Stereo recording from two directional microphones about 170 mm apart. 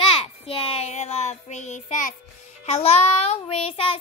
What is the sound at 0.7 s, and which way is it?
Speech, 40° left (ahead or behind).